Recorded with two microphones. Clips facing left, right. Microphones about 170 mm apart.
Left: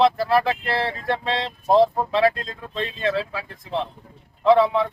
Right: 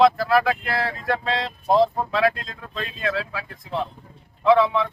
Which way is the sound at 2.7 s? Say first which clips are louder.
Left 3 dB; 30° left (ahead or behind).